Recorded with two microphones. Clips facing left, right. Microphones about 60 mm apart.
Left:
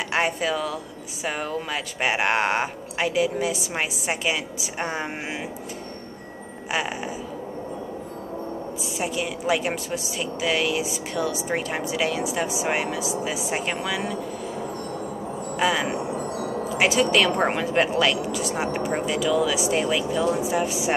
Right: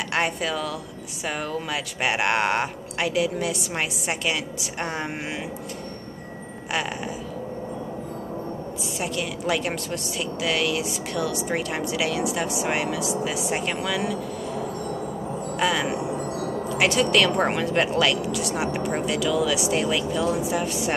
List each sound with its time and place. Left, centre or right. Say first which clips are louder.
0.1 s speech: left 2 dB; centre
9.0 s speech: left 1 dB; centre
15.6 s speech: left 1 dB; centre
16.3 s music: even; centre
16.6 s speech: left 1 dB; centre